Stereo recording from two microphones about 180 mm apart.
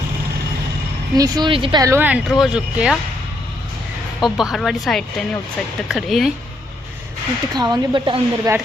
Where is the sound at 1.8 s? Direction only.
10° right (ahead or behind).